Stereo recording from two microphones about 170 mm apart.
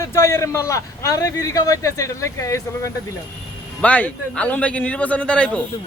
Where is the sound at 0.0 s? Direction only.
15° left (ahead or behind).